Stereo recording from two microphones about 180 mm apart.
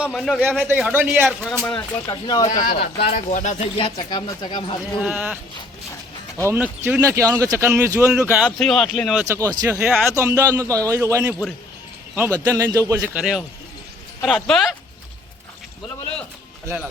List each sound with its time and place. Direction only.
0.0 s speech: centre (ahead or behind)
0.6 s speech: 10° right (ahead or behind)
1.4 s speech: 5° left (ahead or behind)
1.7 s speech: 20° left (ahead or behind)
2.5 s speech: 50° left (ahead or behind)
2.8 s speech: 35° left (ahead or behind)
3.8 s speech: 25° left (ahead or behind)
4.9 s speech: 5° right (ahead or behind)
8.4 s speech: centre (ahead or behind)
9.2 s speech: 15° right (ahead or behind)
9.8 s speech: centre (ahead or behind)
10.2 s speech: 15° right (ahead or behind)
13.1 s speech: centre (ahead or behind)
16.6 s speech: 10° right (ahead or behind)